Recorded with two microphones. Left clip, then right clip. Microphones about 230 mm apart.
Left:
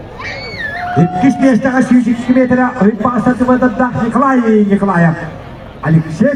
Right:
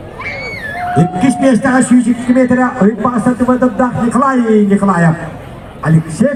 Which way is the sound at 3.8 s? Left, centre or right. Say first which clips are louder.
Even; right.